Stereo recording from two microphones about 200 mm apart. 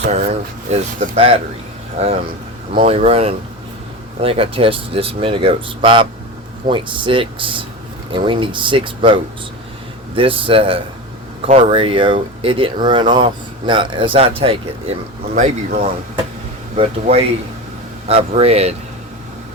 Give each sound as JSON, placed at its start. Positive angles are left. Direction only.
{"t": 0.1, "sound": "speech", "side_deg": -35}
{"t": 15.4, "sound": "speech", "side_deg": -40}